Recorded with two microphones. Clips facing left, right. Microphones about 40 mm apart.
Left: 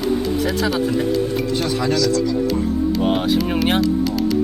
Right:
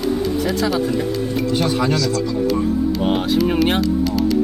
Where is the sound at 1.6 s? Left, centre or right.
Centre.